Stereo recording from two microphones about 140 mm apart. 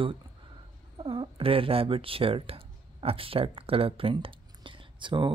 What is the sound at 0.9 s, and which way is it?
Speech, 40° right (ahead or behind).